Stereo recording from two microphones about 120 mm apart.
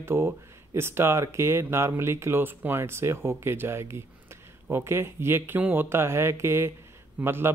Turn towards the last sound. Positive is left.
turn(degrees=-20)  # may be behind; listen again after turning